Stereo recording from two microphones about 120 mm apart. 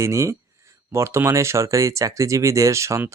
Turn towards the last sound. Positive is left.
turn(degrees=-25)  # may be behind; listen again after turning